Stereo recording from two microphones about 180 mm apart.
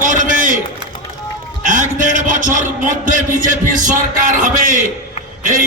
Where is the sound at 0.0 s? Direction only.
45° right (ahead or behind).